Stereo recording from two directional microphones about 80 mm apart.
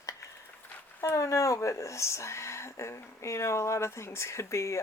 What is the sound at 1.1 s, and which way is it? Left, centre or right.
Speech, left.